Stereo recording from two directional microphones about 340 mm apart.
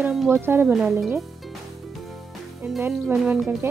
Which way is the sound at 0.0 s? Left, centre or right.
Centre.